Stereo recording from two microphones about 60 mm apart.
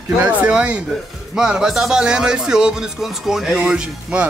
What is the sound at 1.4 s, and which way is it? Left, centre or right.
Speech, centre.